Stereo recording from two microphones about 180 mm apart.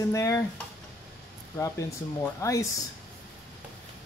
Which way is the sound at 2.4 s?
15° left (ahead or behind).